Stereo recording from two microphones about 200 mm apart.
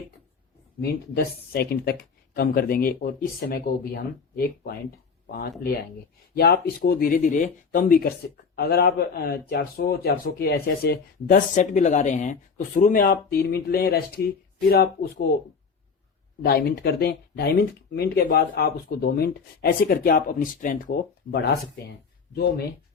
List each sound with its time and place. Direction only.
0.8 s speech: 50° left (ahead or behind)
16.4 s speech: 50° left (ahead or behind)